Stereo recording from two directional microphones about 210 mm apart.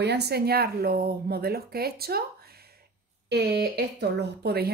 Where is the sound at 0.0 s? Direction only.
50° right (ahead or behind).